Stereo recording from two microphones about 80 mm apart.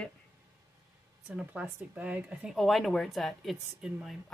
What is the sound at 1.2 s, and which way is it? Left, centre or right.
Speech, centre.